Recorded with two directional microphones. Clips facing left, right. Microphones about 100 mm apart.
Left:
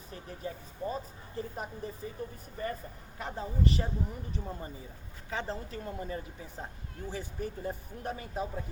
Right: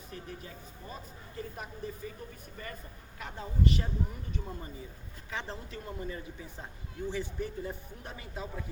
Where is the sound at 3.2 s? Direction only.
35° left (ahead or behind).